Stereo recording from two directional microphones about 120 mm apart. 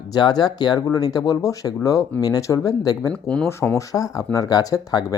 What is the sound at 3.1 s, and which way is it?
Speech, 10° left (ahead or behind).